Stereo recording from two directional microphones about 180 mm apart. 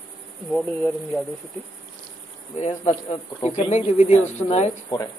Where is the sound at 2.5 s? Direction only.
40° left (ahead or behind).